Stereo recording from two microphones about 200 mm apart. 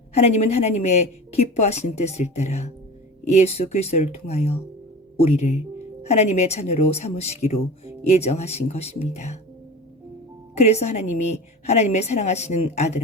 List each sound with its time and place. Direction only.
0.1 s a woman's voice: 35° left (ahead or behind)
10.7 s a woman's voice: 35° left (ahead or behind)